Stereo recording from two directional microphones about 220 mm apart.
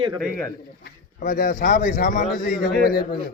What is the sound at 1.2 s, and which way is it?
A man's voice, 35° left (ahead or behind).